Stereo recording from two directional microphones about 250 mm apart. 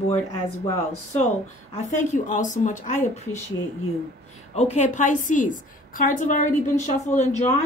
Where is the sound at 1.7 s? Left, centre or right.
Left.